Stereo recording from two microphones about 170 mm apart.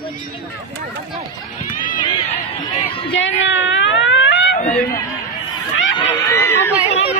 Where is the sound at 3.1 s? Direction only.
90° left.